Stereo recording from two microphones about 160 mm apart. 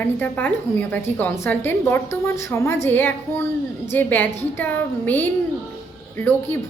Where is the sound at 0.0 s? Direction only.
10° left (ahead or behind).